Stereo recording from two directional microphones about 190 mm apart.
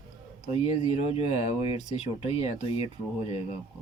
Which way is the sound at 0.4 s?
35° left (ahead or behind).